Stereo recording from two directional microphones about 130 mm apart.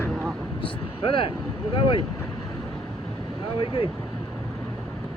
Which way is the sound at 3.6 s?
40° left (ahead or behind).